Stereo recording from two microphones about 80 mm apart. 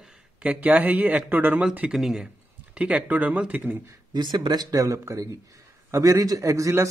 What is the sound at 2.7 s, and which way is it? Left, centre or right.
Speech, centre.